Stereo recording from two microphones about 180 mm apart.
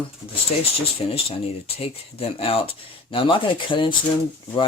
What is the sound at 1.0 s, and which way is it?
Speech, 30° left (ahead or behind).